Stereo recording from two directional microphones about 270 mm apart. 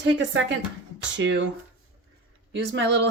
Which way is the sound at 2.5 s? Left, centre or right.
Right.